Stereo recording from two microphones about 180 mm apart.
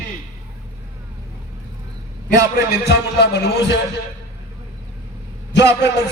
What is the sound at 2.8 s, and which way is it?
Music, 65° left (ahead or behind).